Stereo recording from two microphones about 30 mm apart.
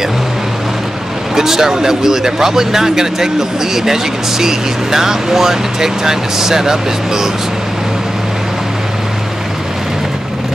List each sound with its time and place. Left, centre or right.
1.3 s speech: centre